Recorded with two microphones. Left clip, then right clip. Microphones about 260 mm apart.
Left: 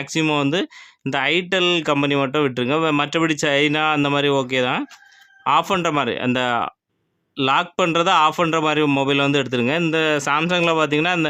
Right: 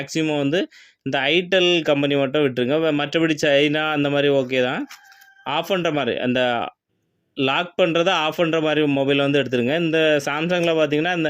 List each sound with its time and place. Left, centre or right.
0.0 s speech: centre